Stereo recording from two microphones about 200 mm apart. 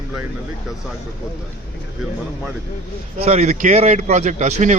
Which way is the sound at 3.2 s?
35° right (ahead or behind).